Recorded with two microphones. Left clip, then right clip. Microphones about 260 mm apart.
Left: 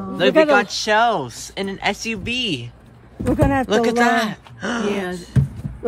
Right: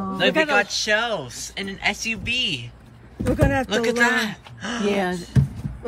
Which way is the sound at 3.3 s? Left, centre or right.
Left.